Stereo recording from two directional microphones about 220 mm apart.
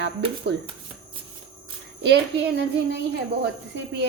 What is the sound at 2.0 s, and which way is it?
Speech, 50° right (ahead or behind).